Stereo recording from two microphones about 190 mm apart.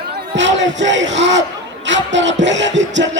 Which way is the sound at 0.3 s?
70° right (ahead or behind).